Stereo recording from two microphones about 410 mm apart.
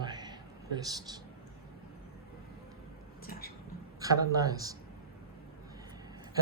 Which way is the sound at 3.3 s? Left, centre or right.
Left.